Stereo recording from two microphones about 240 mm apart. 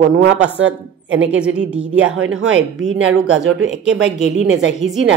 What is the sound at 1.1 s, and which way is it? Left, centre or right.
Speech, right.